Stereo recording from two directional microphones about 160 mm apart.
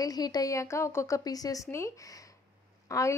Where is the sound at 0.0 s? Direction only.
25° left (ahead or behind).